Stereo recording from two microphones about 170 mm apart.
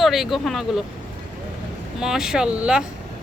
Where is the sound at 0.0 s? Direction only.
Centre (ahead or behind).